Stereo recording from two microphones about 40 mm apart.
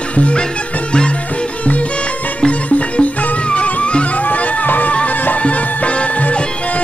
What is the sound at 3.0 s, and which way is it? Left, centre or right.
Music, left.